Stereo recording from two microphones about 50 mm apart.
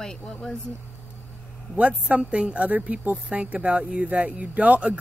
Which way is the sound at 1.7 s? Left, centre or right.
Right.